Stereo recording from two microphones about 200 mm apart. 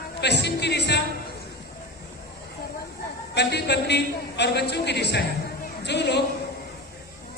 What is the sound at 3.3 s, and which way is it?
A man's voice, 55° left (ahead or behind).